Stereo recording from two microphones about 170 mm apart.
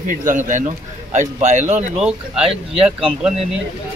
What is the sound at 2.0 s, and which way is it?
Speech, 5° right (ahead or behind).